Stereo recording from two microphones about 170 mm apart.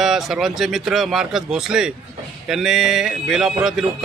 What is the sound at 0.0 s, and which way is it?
A man's voice, centre (ahead or behind).